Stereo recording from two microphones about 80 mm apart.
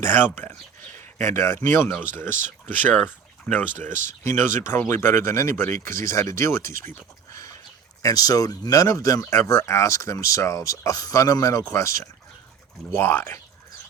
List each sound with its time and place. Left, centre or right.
0.0 s speech: left
3.8 s speech: left
8.0 s speech: left
12.9 s speech: left